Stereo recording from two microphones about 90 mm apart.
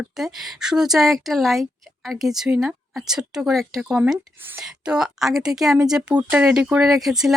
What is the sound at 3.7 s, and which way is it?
A woman's voice, 10° right (ahead or behind).